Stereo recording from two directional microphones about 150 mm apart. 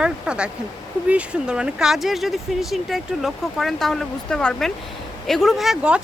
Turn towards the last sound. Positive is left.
turn(degrees=-5)  # may be behind; listen again after turning